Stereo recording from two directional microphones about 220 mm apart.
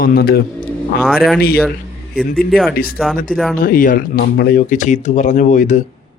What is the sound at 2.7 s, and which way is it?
Speech, 40° left (ahead or behind).